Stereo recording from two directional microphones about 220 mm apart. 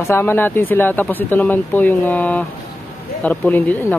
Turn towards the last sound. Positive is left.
turn(degrees=5)  # may be behind; listen again after turning